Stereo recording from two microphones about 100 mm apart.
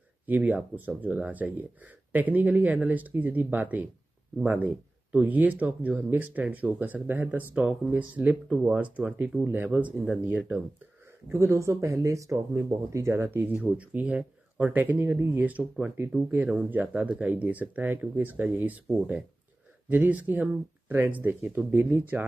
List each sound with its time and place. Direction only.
0.3 s speech: 10° right (ahead or behind)
11.3 s speech: 30° right (ahead or behind)
19.9 s speech: 15° right (ahead or behind)